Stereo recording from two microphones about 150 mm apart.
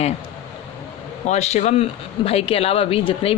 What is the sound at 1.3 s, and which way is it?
Speech, 45° left (ahead or behind).